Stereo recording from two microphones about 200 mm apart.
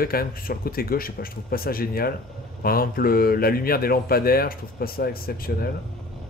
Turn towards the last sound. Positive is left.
turn(degrees=50)  # may be behind; listen again after turning